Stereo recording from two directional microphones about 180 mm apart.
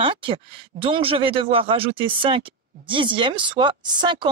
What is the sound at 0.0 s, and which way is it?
Speech, 30° right (ahead or behind).